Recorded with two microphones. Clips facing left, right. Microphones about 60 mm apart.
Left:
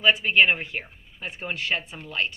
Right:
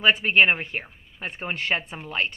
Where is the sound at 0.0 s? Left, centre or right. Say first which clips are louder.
Right 1 dB; right.